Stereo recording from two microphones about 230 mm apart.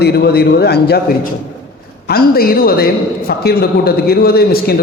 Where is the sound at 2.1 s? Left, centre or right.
Left.